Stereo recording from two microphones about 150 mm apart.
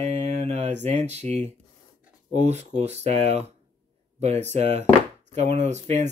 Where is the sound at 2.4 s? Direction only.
50° right (ahead or behind).